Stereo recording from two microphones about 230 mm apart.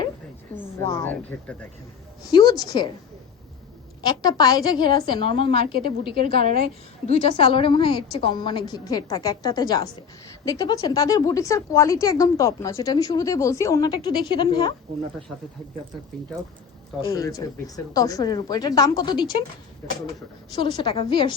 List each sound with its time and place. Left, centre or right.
0.9 s a woman's voice: centre
4.0 s a woman's voice: centre
17.1 s a woman's voice: centre
20.5 s a woman's voice: centre